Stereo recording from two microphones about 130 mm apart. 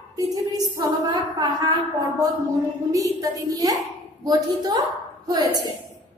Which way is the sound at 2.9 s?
25° right (ahead or behind).